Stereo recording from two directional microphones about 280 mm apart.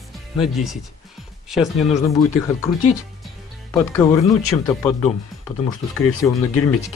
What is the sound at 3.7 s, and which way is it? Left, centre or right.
Speech, centre.